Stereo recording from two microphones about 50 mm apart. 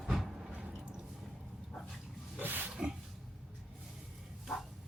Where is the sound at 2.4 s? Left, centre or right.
Right.